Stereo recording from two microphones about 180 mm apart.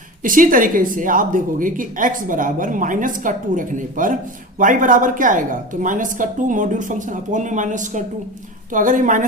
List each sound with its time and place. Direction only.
0.2 s speech: 50° right (ahead or behind)